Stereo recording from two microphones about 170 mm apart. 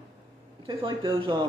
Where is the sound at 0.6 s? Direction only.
30° right (ahead or behind).